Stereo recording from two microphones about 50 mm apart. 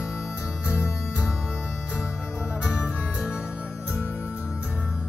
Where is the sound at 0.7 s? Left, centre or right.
Left.